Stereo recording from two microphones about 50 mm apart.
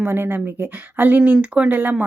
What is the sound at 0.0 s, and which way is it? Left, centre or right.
Speech, right.